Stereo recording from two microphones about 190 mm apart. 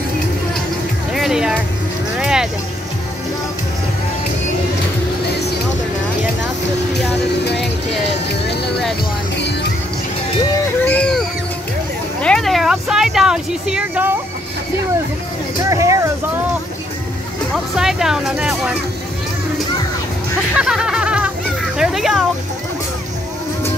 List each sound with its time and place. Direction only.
1.1 s music: centre (ahead or behind)
2.1 s vehicle: 5° right (ahead or behind)
7.4 s music: 60° left (ahead or behind)
10.9 s a sound: 5° left (ahead or behind)
15.7 s vehicle: 15° right (ahead or behind)
17.7 s speech: centre (ahead or behind)
20.5 s music: 5° right (ahead or behind)